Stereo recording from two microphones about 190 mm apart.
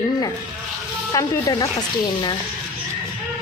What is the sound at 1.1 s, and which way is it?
Speech, 20° left (ahead or behind).